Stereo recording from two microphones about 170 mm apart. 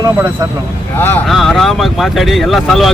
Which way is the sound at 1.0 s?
10° left (ahead or behind).